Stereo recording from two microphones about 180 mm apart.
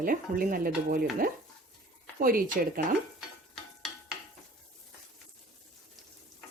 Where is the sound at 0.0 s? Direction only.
50° right (ahead or behind).